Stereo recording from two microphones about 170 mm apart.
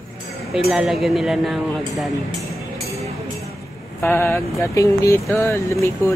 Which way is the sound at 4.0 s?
10° left (ahead or behind).